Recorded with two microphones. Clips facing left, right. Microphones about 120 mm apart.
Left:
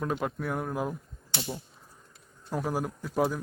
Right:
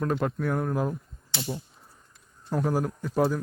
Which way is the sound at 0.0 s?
5° left (ahead or behind).